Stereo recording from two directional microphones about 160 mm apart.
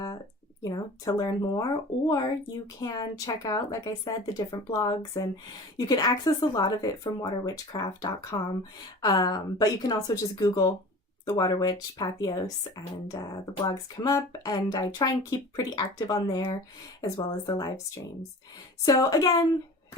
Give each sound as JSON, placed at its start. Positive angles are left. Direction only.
{"t": 0.6, "sound": "speech", "side_deg": 25}
{"t": 18.9, "sound": "speech", "side_deg": 25}